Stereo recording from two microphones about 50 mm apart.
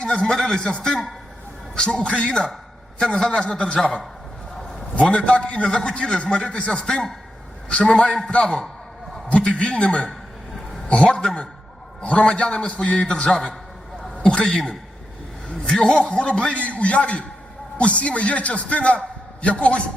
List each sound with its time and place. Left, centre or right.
0.0 s a man's voice: centre
5.0 s a man's voice: left
8.0 s a man's voice: centre
15.6 s a man's voice: centre